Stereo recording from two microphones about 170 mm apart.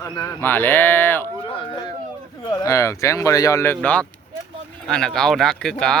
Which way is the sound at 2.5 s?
15° left (ahead or behind).